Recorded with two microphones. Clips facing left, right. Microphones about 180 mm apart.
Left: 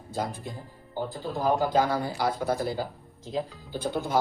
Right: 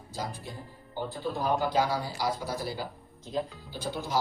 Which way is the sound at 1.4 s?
45° left (ahead or behind).